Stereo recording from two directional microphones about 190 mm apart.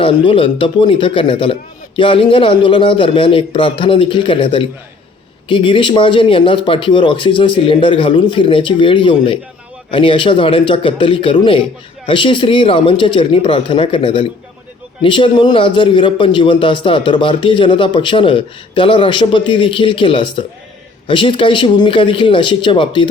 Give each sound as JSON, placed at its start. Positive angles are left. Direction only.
{"t": 0.0, "sound": "a man's voice", "side_deg": 25}